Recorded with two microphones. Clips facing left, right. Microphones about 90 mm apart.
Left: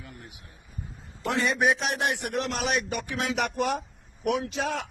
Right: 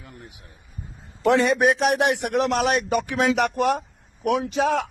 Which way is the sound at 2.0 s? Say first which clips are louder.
Right 7 dB; 85° right.